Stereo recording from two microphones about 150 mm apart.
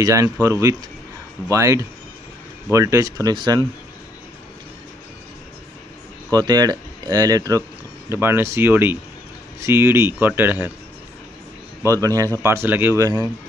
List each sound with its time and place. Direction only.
0.0 s speech: 20° right (ahead or behind)
6.3 s speech: 25° right (ahead or behind)
11.9 s speech: 25° right (ahead or behind)